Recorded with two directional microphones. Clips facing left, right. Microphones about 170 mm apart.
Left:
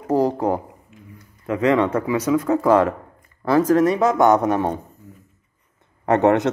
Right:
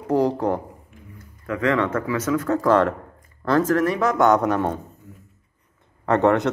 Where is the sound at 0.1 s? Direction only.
5° left (ahead or behind).